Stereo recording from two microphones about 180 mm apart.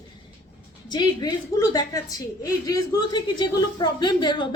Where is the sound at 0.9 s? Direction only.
20° left (ahead or behind).